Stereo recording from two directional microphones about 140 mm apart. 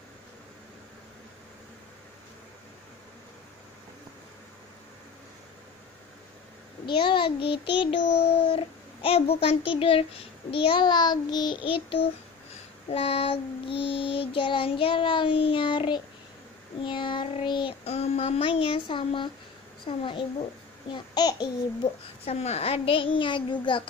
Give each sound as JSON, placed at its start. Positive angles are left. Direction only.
{"t": 6.9, "sound": "child singing", "side_deg": 35}
{"t": 17.8, "sound": "speech", "side_deg": 50}
{"t": 19.9, "sound": "child singing", "side_deg": 40}
{"t": 22.2, "sound": "child singing", "side_deg": 50}